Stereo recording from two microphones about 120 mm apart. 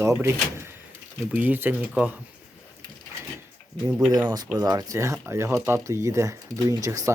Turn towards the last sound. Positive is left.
turn(degrees=-25)  # may be behind; listen again after turning